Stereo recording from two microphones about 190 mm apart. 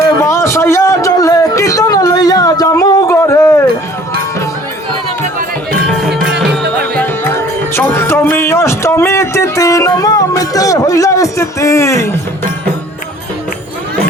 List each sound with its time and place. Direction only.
0.2 s a sound: 15° left (ahead or behind)
5.9 s music: centre (ahead or behind)
6.9 s music: 10° left (ahead or behind)